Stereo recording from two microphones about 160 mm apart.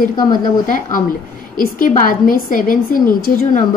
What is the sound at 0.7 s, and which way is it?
A woman's voice, 55° left (ahead or behind).